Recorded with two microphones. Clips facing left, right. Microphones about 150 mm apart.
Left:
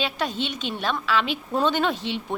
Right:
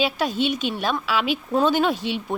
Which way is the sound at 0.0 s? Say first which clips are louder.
Right 5 dB; 10° right (ahead or behind).